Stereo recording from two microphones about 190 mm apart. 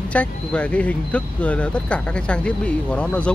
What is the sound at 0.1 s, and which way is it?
Speech, 5° left (ahead or behind).